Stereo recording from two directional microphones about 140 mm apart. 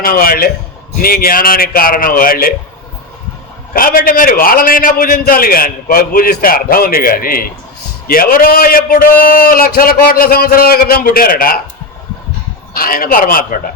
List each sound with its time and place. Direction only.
0.0 s a man's voice: 90° left
3.8 s a man's voice: 90° left
12.7 s a man's voice: 90° left